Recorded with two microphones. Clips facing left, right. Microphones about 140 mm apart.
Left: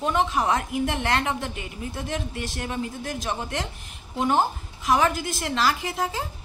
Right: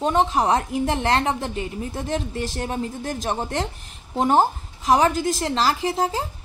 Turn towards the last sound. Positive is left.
turn(degrees=-35)  # may be behind; listen again after turning